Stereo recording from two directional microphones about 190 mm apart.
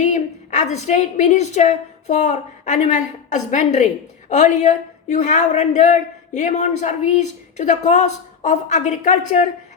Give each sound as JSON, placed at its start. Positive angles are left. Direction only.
{"t": 0.0, "sound": "a woman's voice", "side_deg": 40}